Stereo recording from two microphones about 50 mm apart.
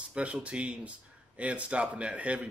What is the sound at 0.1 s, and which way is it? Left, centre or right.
Speech, right.